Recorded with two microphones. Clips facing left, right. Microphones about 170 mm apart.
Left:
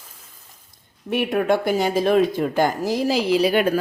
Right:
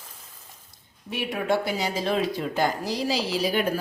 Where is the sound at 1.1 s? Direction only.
55° left (ahead or behind).